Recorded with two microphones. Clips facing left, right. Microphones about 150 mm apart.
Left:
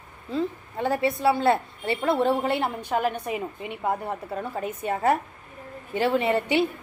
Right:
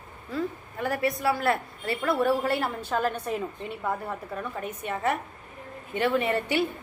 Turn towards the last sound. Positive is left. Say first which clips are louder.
# left 3 dB
turn(degrees=25)  # may be behind; listen again after turning